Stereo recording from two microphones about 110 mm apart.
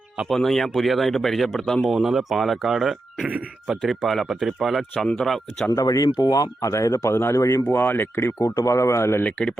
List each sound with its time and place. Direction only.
0.2 s a man's voice: centre (ahead or behind)
3.2 s speech: 15° right (ahead or behind)
3.8 s a man's voice: 5° left (ahead or behind)
5.7 s speech: 35° left (ahead or behind)